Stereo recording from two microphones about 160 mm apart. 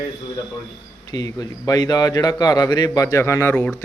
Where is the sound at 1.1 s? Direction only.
25° left (ahead or behind).